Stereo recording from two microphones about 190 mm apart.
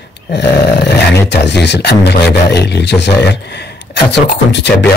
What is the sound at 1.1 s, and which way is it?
Speech, 60° left (ahead or behind).